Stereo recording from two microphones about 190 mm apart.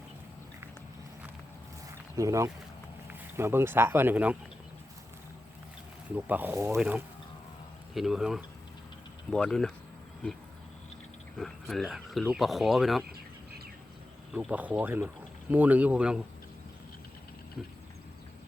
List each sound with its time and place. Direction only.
2.1 s speech: 15° right (ahead or behind)
6.1 s speech: 10° right (ahead or behind)
11.3 s speech: centre (ahead or behind)
14.3 s speech: 5° right (ahead or behind)